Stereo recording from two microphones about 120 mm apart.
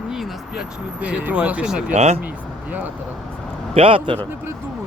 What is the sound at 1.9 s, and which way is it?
Speech, 60° right (ahead or behind).